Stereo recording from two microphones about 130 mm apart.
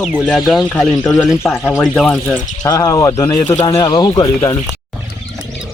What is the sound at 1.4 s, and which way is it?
Speech, 20° left (ahead or behind).